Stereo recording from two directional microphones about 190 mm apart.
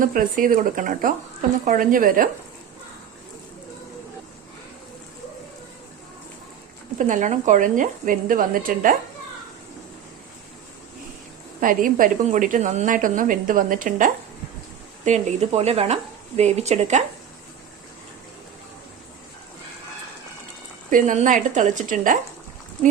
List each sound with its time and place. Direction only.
0.0 s a woman's voice: 45° right (ahead or behind)
7.0 s a woman's voice: 40° right (ahead or behind)
11.6 s a woman's voice: 45° right (ahead or behind)
20.9 s a woman's voice: 45° right (ahead or behind)